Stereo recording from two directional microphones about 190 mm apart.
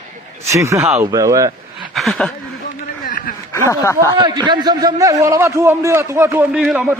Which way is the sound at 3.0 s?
45° left (ahead or behind).